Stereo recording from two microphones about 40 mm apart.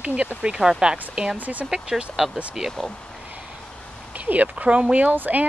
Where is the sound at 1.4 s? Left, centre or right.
Right.